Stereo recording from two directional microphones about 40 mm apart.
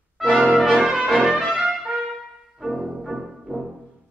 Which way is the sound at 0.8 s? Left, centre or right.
Centre.